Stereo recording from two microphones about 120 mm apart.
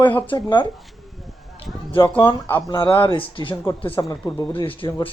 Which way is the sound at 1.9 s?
40° left (ahead or behind).